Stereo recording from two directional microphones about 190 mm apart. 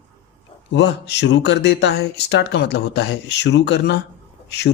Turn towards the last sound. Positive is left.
turn(degrees=65)  # may be behind; listen again after turning